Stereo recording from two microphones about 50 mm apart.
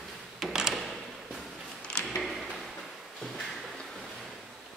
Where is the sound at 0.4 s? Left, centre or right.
Centre.